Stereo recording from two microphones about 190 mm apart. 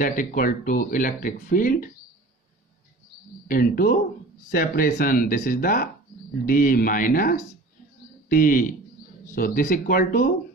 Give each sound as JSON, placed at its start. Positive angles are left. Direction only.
{"t": 0.0, "sound": "speech", "side_deg": 45}
{"t": 3.4, "sound": "speech", "side_deg": 45}